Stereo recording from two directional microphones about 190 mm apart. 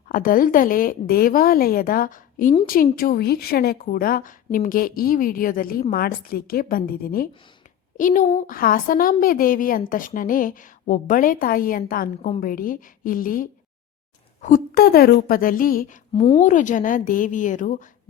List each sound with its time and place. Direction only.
0.1 s a woman's voice: 45° left (ahead or behind)
16.1 s a woman's voice: 25° left (ahead or behind)
16.4 s a woman's voice: 40° left (ahead or behind)